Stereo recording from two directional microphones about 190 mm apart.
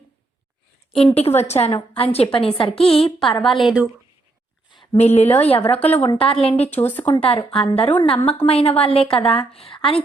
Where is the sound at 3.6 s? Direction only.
5° right (ahead or behind).